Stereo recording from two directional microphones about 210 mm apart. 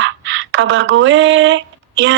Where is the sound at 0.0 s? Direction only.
65° right (ahead or behind).